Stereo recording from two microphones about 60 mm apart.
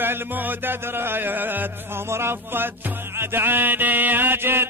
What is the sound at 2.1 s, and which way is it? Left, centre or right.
Music, right.